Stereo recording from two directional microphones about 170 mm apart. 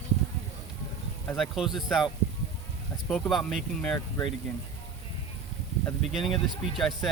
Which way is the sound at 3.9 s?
20° left (ahead or behind).